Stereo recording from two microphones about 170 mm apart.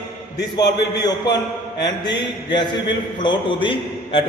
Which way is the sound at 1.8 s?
25° left (ahead or behind).